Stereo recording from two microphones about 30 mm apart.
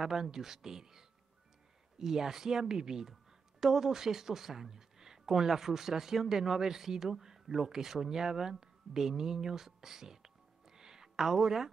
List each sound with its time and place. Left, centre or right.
0.0 s speech: centre